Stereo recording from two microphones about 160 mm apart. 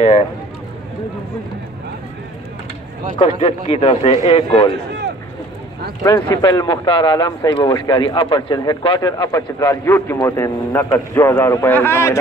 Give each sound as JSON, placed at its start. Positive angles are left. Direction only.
{"t": 3.2, "sound": "a man's voice", "side_deg": 35}
{"t": 6.0, "sound": "a man's voice", "side_deg": 20}